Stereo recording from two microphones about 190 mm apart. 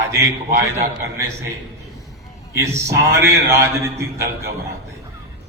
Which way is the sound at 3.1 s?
15° right (ahead or behind).